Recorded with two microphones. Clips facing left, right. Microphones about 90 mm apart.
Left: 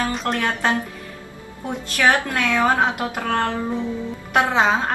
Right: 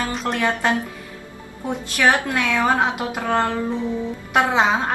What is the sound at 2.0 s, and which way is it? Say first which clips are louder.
A woman's voice: even; 15° right (ahead or behind).